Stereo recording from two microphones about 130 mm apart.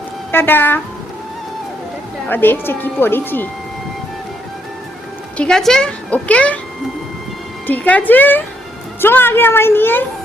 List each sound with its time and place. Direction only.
0.3 s a woman's voice: 15° left (ahead or behind)
2.3 s a woman's voice: 15° left (ahead or behind)
5.4 s a woman's voice: 5° left (ahead or behind)
7.7 s a woman's voice: 10° left (ahead or behind)